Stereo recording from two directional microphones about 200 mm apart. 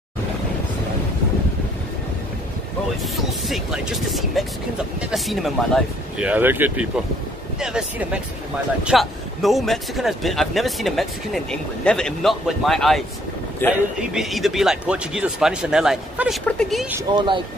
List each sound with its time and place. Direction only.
3.0 s a man's voice: centre (ahead or behind)
13.9 s speech: centre (ahead or behind)
17.1 s speech: 25° right (ahead or behind)